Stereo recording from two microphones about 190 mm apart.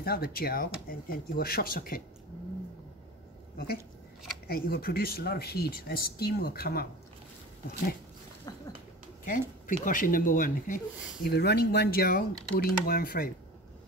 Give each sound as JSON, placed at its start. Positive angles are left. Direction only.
{"t": 0.0, "sound": "speech", "side_deg": 55}
{"t": 3.5, "sound": "speech", "side_deg": 55}
{"t": 8.5, "sound": "a sound", "side_deg": 20}
{"t": 9.2, "sound": "speech", "side_deg": 45}
{"t": 11.2, "sound": "speech", "side_deg": 60}